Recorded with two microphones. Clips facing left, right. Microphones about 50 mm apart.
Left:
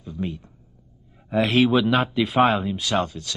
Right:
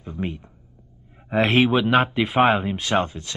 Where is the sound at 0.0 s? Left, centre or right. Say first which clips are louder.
Right 1 dB; right.